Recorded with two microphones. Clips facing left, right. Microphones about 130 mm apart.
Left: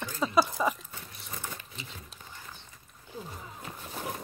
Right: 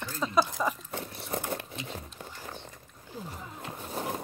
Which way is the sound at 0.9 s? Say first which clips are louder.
Right 10 dB; 60° right (ahead or behind).